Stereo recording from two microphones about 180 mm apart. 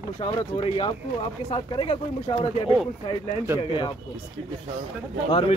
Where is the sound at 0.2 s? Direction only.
30° left (ahead or behind).